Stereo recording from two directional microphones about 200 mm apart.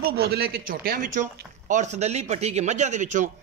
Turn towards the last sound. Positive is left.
turn(degrees=-40)  # may be behind; listen again after turning